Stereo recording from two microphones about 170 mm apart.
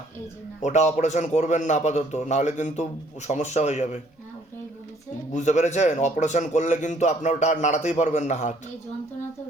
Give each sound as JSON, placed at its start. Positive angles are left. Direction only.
{"t": 0.6, "sound": "a man's voice", "side_deg": 45}
{"t": 5.3, "sound": "a man's voice", "side_deg": 45}